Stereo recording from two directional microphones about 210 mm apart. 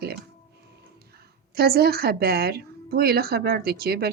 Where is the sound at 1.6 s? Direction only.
45° right (ahead or behind).